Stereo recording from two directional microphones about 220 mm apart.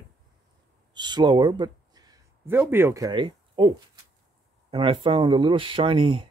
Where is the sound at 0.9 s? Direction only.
20° right (ahead or behind).